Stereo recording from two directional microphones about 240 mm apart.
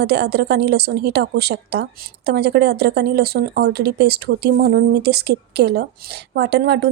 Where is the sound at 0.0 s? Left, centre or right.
Right.